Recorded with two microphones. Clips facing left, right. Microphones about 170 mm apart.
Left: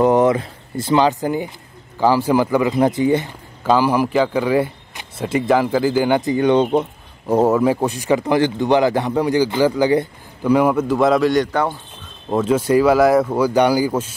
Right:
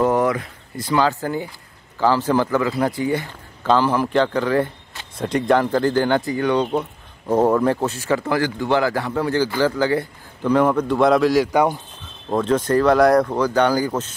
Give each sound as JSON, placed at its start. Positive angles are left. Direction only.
{"t": 0.0, "sound": "speech", "side_deg": 20}
{"t": 3.6, "sound": "speech", "side_deg": 10}
{"t": 7.2, "sound": "speech", "side_deg": 10}
{"t": 12.3, "sound": "speech", "side_deg": 5}